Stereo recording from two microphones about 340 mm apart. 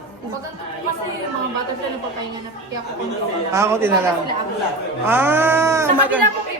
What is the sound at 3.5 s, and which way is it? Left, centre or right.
Speech, centre.